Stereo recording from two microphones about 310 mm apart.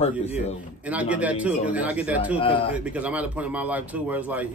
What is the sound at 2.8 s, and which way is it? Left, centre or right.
Speech, centre.